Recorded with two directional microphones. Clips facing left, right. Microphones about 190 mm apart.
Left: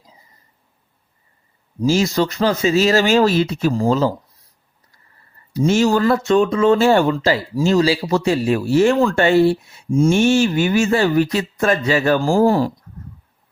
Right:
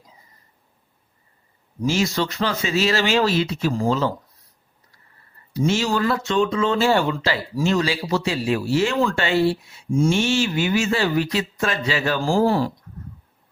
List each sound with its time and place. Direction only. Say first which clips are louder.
1.8 s speech: left 5 dB; 40° left (ahead or behind)
5.5 s speech: left 6 dB; 45° left (ahead or behind)